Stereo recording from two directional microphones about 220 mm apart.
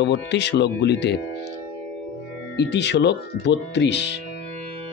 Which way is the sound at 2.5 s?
50° left (ahead or behind).